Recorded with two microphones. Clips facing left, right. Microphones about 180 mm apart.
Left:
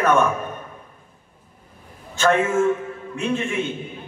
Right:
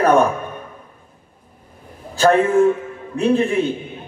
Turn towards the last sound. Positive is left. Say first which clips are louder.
# right 7 dB
turn(degrees=-35)  # may be behind; listen again after turning